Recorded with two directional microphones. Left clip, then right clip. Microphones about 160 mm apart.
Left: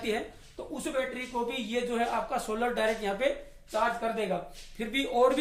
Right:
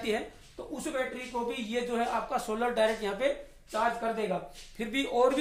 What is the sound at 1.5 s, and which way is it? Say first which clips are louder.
A woman's voice: left 1 dB; 15° right (ahead or behind).